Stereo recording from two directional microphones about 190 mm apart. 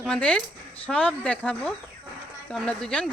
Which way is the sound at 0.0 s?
5° left (ahead or behind).